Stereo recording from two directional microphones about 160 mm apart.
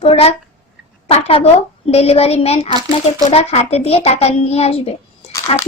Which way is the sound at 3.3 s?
40° left (ahead or behind).